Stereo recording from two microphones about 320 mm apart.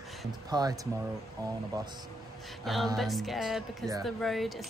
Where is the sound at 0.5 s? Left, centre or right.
Centre.